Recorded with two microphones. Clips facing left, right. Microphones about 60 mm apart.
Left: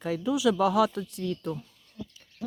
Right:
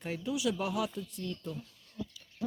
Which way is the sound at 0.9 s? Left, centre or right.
Left.